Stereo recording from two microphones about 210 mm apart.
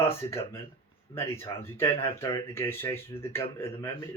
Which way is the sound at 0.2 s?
15° left (ahead or behind).